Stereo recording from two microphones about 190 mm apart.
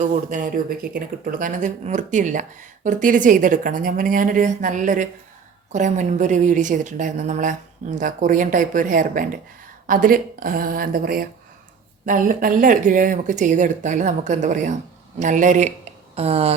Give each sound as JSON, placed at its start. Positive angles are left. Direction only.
{"t": 0.0, "sound": "a woman's voice", "side_deg": -40}